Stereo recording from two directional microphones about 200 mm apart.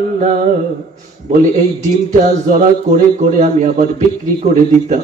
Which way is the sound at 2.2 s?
40° right (ahead or behind).